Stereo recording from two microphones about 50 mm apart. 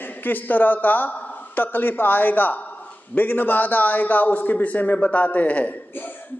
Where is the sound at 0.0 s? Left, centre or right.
Left.